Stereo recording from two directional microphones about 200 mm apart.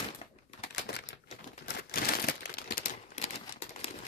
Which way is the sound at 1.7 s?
50° left (ahead or behind).